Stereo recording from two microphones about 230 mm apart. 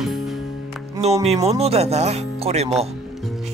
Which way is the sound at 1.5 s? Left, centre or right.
Right.